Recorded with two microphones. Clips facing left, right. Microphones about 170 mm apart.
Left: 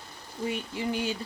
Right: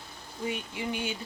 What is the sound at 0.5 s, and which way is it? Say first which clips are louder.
Speech: left 5 dB; 35° left (ahead or behind).